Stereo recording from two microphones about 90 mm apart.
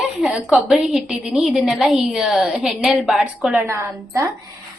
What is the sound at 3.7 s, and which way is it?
Speech, 30° right (ahead or behind).